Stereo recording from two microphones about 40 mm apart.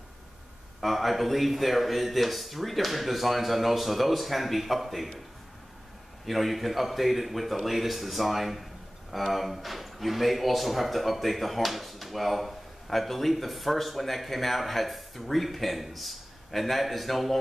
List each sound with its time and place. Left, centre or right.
0.7 s speech: centre
6.2 s speech: centre